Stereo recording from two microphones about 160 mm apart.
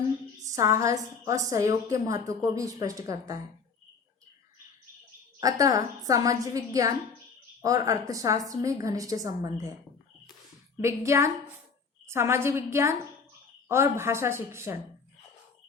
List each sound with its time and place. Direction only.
0.5 s a woman's voice: 20° right (ahead or behind)
5.4 s a woman's voice: 20° right (ahead or behind)
10.8 s a woman's voice: 15° right (ahead or behind)